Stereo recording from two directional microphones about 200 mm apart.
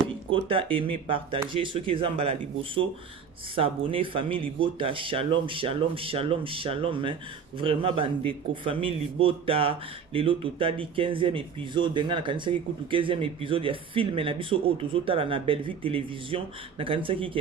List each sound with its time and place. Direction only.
0.3 s speech: 25° right (ahead or behind)